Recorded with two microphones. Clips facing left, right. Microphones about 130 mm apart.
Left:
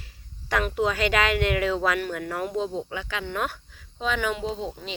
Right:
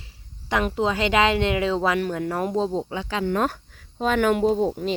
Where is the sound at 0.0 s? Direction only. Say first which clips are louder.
Even; 20° right (ahead or behind).